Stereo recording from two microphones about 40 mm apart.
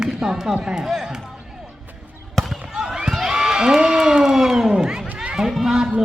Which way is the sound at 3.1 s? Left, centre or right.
Centre.